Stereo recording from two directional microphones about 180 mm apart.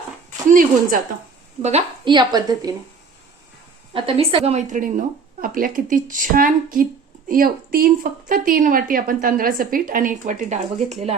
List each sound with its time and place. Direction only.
0.3 s speech: 50° right (ahead or behind)
1.6 s a woman's voice: 35° right (ahead or behind)
2.1 s a woman's voice: 20° right (ahead or behind)
3.9 s a woman's voice: 30° right (ahead or behind)